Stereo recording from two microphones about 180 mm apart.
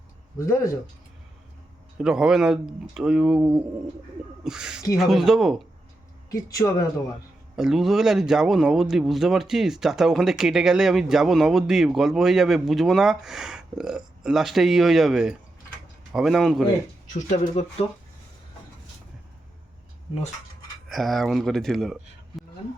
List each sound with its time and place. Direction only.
0.3 s speech: 15° left (ahead or behind)
2.0 s speech: 5° right (ahead or behind)
6.3 s speech: 20° left (ahead or behind)
7.5 s speech: centre (ahead or behind)
17.2 s speech: 45° left (ahead or behind)
20.8 s speech: centre (ahead or behind)